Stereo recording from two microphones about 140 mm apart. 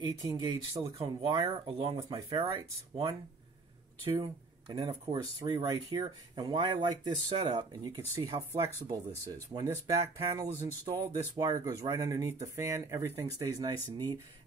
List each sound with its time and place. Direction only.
0.0 s speech: 30° right (ahead or behind)
5.1 s speech: 25° right (ahead or behind)